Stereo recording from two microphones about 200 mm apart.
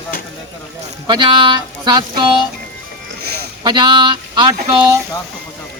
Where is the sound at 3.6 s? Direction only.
20° right (ahead or behind).